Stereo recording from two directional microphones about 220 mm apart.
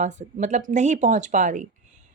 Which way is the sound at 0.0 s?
35° right (ahead or behind).